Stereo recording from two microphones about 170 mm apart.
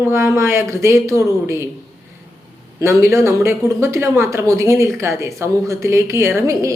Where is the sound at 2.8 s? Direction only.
15° right (ahead or behind).